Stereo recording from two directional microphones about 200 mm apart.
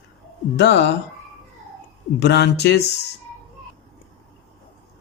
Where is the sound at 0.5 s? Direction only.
60° left (ahead or behind).